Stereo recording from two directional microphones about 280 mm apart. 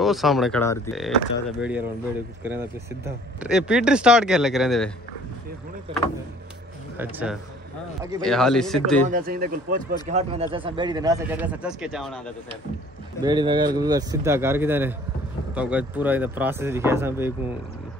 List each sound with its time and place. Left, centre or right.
0.0 s speech: centre
7.0 s speech: centre
9.0 s speech: right; by 12.2 s centre
13.2 s speech: centre